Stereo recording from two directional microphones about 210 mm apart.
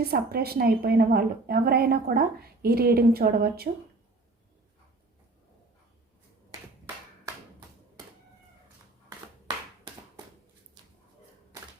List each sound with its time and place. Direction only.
0.0 s a woman's voice: 50° right (ahead or behind)